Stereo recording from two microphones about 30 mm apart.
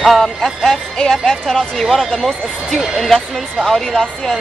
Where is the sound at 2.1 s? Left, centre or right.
Centre.